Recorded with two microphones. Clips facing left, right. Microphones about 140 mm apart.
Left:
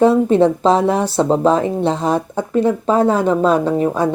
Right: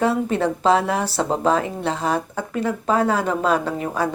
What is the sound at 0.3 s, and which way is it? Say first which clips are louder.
Speech: left 6 dB; 25° left (ahead or behind).